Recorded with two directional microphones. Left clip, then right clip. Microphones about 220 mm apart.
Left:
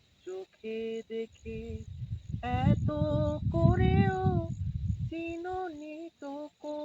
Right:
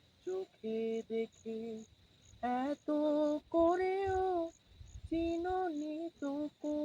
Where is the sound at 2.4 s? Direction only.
5° right (ahead or behind).